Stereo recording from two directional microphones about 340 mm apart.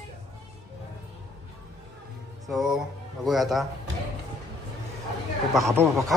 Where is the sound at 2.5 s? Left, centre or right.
Centre.